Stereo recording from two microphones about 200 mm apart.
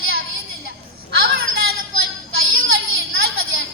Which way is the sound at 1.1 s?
50° right (ahead or behind).